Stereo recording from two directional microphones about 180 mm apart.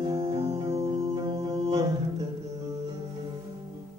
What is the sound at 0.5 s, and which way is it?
Music, 20° right (ahead or behind).